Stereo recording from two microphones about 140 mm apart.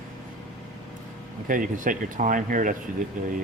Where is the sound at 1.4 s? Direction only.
75° right (ahead or behind).